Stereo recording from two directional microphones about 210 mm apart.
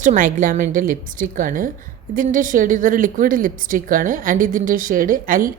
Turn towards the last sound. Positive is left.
turn(degrees=-40)  # may be behind; listen again after turning